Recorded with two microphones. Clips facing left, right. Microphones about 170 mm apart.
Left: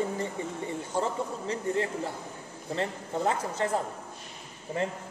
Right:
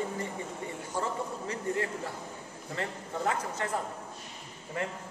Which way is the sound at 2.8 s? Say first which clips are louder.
Left 4 dB; 30° left (ahead or behind).